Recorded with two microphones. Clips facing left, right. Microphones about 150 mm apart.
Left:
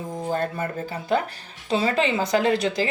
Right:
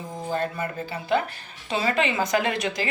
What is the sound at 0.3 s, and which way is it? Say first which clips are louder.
Speech: right 1 dB; 45° left (ahead or behind).